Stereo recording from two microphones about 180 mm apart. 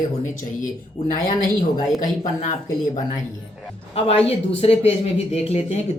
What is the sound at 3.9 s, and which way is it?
Speech, 35° left (ahead or behind).